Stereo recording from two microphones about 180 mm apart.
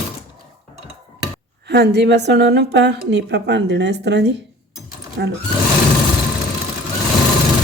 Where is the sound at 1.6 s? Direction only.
65° right (ahead or behind).